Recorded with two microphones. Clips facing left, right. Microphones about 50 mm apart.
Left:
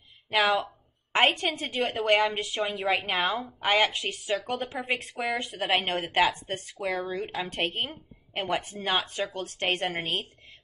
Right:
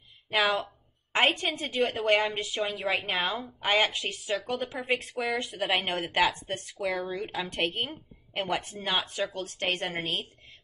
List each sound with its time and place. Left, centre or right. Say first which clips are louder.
0.3 s a woman's voice: left 2 dB; left
2.0 s a woman's voice: left 2 dB; left
6.2 s speech: left 1 dB; centre
6.5 s a woman's voice: even; left